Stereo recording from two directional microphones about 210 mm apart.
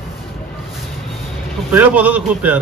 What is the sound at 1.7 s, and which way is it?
Speech, 5° right (ahead or behind).